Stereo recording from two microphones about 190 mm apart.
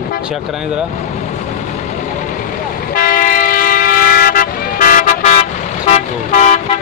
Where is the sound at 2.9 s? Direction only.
45° left (ahead or behind).